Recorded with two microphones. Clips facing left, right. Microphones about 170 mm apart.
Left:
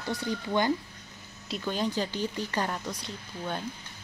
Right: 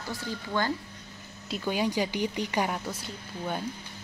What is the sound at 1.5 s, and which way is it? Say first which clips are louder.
Speech: right 2 dB; 10° right (ahead or behind).